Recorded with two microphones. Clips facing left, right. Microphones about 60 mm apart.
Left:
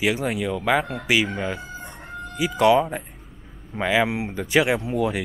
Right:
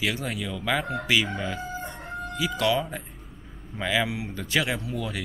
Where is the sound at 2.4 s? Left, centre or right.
Left.